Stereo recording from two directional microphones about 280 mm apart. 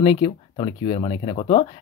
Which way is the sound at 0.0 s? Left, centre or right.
Centre.